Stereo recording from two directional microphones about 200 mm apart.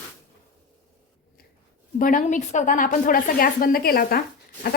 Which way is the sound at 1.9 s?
40° left (ahead or behind).